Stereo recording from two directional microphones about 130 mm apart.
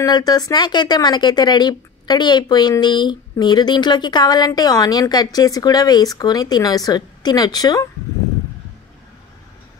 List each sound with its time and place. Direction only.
0.0 s speech: 30° left (ahead or behind)